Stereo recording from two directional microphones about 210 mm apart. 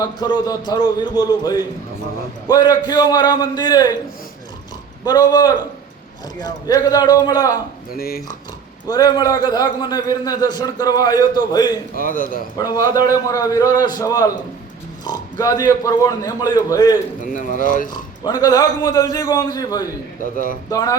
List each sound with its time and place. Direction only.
0.0 s a man's voice: 20° left (ahead or behind)
5.0 s a man's voice: 20° left (ahead or behind)
7.9 s speech: 45° left (ahead or behind)
8.9 s a man's voice: 20° left (ahead or behind)
11.9 s speech: 40° left (ahead or behind)
12.5 s a man's voice: 20° left (ahead or behind)
15.0 s grunt: 15° left (ahead or behind)
15.8 s a man's voice: 15° left (ahead or behind)
17.3 s speech: 40° left (ahead or behind)
18.2 s a man's voice: 20° left (ahead or behind)